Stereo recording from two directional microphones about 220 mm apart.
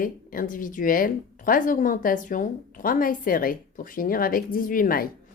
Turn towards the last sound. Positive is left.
turn(degrees=40)  # may be behind; listen again after turning